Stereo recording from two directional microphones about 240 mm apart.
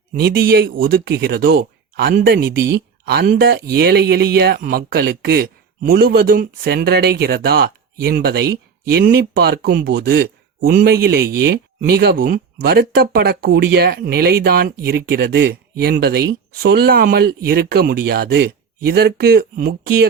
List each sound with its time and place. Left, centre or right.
0.1 s speech: right